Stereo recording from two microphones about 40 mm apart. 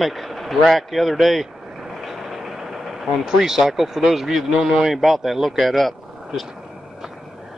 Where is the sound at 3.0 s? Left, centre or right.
Centre.